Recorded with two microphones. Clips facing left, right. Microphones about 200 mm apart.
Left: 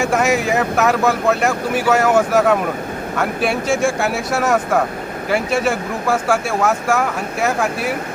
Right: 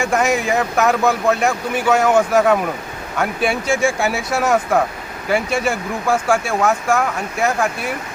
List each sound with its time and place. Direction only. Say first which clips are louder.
0.0 s speech: left 1 dB; 5° left (ahead or behind)